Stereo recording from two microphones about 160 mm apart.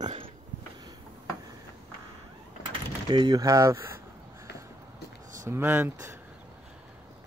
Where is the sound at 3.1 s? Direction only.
25° right (ahead or behind).